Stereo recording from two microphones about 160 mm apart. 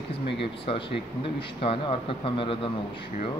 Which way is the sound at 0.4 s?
35° left (ahead or behind).